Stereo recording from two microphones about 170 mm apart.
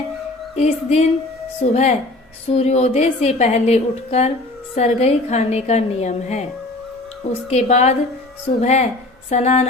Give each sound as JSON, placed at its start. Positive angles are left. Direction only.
{"t": 0.5, "sound": "a woman's voice", "side_deg": 40}
{"t": 7.5, "sound": "a woman's voice", "side_deg": 40}